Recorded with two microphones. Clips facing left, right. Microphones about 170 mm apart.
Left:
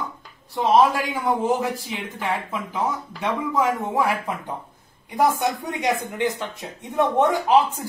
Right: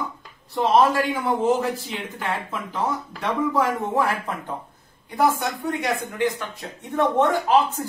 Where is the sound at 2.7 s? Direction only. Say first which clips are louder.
Even; 10° left (ahead or behind).